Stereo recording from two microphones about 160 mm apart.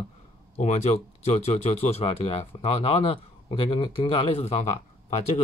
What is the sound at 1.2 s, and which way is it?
Speech, 40° left (ahead or behind).